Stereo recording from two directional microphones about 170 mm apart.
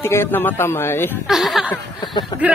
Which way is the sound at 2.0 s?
25° left (ahead or behind).